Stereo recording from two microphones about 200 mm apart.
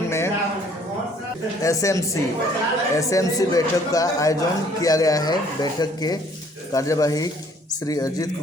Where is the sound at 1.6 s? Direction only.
15° left (ahead or behind).